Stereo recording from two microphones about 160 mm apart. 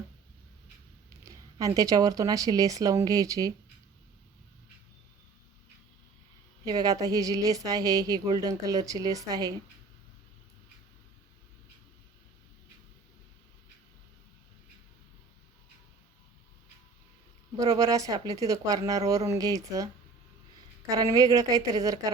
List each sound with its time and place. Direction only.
1.2 s a woman's voice: 20° right (ahead or behind)
6.7 s a woman's voice: 25° right (ahead or behind)
17.6 s a woman's voice: 20° right (ahead or behind)